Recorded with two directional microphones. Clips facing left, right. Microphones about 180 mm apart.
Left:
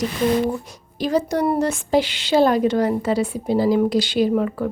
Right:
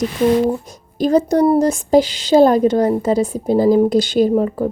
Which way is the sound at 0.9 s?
45° right (ahead or behind).